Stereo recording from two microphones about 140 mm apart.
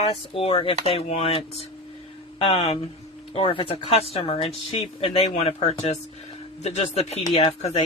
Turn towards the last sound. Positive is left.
turn(degrees=45)  # may be behind; listen again after turning